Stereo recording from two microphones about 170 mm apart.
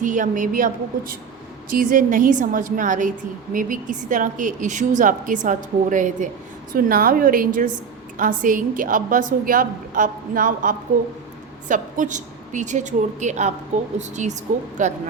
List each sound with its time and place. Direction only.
0.0 s a woman's voice: 50° right (ahead or behind)